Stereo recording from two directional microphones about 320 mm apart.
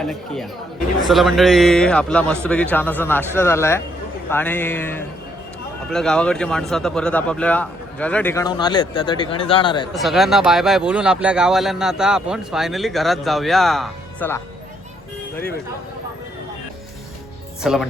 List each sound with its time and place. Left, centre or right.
0.0 s speech: centre
9.9 s speech: centre
17.6 s speech: centre